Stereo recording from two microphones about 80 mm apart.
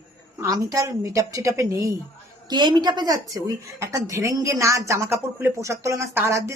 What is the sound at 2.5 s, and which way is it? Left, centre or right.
Speech, right.